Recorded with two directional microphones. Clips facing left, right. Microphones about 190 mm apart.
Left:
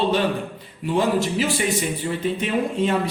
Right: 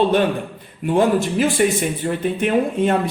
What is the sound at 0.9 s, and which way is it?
Speech, 55° right (ahead or behind).